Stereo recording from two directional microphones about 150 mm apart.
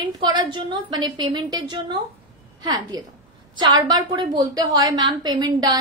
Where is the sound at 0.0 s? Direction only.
30° right (ahead or behind).